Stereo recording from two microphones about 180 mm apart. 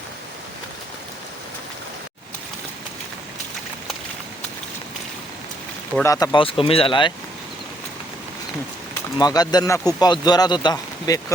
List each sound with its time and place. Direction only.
6.0 s speech: 15° left (ahead or behind)
9.1 s speech: 20° left (ahead or behind)